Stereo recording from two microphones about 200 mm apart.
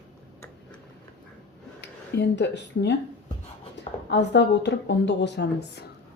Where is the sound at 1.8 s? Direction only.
60° left (ahead or behind).